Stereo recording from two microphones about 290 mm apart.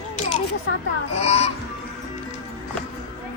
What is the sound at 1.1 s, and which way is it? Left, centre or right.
Music, left.